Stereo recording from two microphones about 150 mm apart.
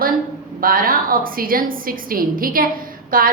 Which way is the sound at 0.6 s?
70° right (ahead or behind).